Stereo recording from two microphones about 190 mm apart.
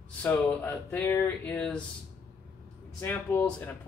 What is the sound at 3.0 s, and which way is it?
Speech, 10° left (ahead or behind).